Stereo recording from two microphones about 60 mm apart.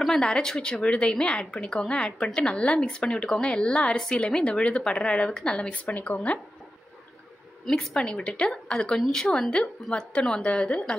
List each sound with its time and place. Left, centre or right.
0.0 s a woman's voice: centre
5.9 s speech: left
7.7 s a woman's voice: centre